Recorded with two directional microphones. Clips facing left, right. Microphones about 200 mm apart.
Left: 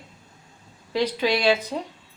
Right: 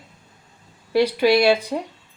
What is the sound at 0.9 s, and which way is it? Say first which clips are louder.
Speech: right 6 dB; 10° right (ahead or behind).